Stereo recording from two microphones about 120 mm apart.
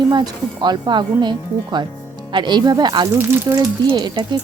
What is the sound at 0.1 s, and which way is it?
Speech, 35° right (ahead or behind).